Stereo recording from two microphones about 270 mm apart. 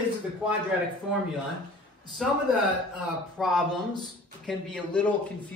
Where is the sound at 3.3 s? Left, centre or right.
Centre.